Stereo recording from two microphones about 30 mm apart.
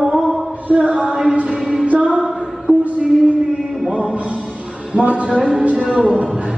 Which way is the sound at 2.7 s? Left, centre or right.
Right.